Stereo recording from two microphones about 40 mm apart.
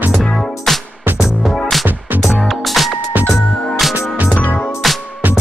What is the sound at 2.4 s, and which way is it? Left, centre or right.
Music, centre.